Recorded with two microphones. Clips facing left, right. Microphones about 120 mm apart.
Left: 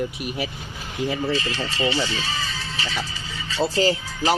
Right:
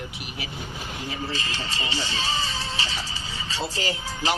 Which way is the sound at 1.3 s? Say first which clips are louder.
Left 6 dB; 30° right (ahead or behind).